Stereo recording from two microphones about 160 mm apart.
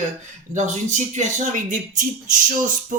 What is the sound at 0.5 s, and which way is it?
Speech, 45° right (ahead or behind).